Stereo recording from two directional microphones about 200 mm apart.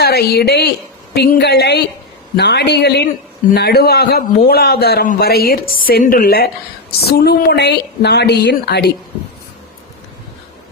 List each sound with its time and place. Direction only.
0.0 s a woman's voice: 50° left (ahead or behind)